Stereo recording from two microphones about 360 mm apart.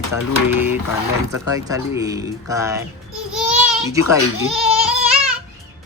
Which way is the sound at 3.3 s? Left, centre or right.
Centre.